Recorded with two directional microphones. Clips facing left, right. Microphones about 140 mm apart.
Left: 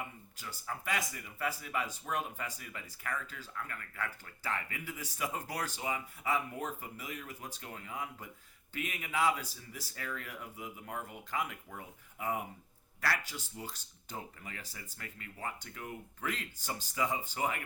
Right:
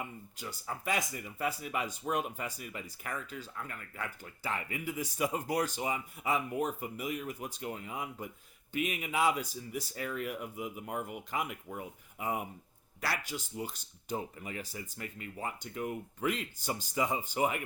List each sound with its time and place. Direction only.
0.9 s speech: 20° right (ahead or behind)
13.0 s speech: 15° right (ahead or behind)